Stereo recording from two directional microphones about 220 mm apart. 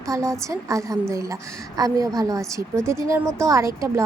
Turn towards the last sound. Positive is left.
turn(degrees=-15)  # may be behind; listen again after turning